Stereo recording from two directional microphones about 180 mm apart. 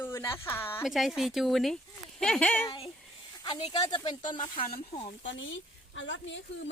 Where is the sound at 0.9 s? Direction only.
Centre (ahead or behind).